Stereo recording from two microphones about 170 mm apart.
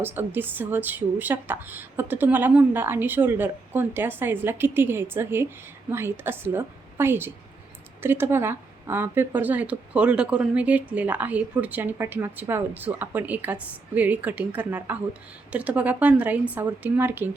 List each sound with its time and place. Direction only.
0.0 s speech: 10° right (ahead or behind)